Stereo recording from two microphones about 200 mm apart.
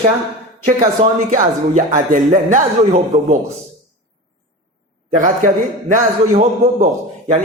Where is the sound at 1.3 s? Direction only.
40° right (ahead or behind).